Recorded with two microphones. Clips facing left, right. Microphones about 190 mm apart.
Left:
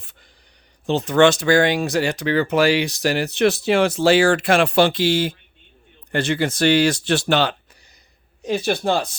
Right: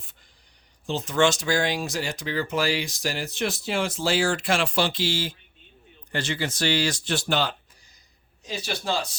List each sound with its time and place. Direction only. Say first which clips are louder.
0.9 s speech: left 7 dB; 65° left (ahead or behind)
8.4 s speech: left 9 dB; 55° left (ahead or behind)